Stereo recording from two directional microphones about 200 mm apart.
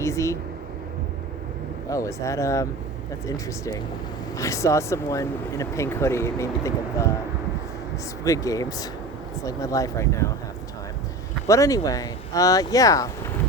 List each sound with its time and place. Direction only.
0.0 s speech: 15° left (ahead or behind)
1.9 s speech: 15° left (ahead or behind)
8.2 s speech: 15° left (ahead or behind)
11.4 s speech: 15° left (ahead or behind)